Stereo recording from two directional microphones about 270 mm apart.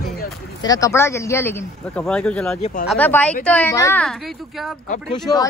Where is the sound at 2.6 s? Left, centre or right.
Left.